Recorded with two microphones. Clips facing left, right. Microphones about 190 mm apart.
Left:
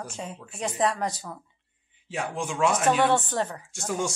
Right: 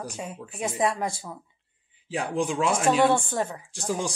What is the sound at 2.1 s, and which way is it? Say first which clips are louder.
Speech: right 4 dB; 35° right (ahead or behind).